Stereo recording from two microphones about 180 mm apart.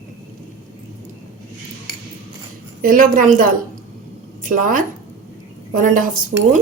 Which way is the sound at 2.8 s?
50° right (ahead or behind).